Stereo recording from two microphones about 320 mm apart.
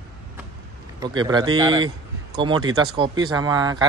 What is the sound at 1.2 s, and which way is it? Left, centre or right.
Speech, centre.